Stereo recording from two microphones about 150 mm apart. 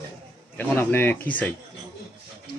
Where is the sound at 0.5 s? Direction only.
10° left (ahead or behind).